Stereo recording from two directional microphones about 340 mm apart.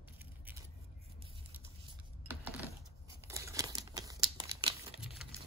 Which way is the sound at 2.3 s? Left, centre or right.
Centre.